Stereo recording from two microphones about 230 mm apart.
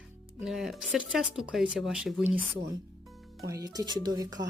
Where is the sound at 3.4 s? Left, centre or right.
Centre.